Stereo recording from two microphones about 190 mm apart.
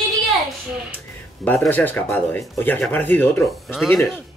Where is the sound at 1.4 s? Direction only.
5° left (ahead or behind).